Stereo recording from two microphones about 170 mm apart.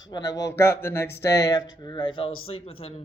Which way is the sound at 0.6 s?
15° left (ahead or behind).